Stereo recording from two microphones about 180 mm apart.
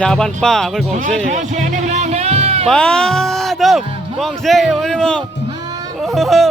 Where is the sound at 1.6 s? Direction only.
40° right (ahead or behind).